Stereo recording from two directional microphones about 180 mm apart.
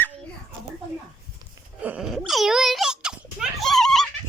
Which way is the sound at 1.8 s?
5° right (ahead or behind).